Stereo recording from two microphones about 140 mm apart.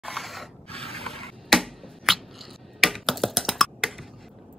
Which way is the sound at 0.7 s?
45° right (ahead or behind).